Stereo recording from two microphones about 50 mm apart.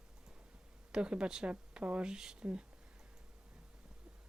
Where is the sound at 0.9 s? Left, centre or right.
Centre.